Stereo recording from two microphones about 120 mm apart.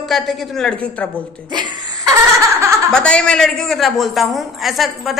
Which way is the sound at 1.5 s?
35° right (ahead or behind).